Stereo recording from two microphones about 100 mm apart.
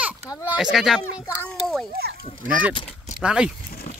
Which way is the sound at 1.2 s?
25° left (ahead or behind).